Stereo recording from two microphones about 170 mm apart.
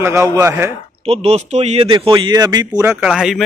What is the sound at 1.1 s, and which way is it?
A man's voice, 40° right (ahead or behind).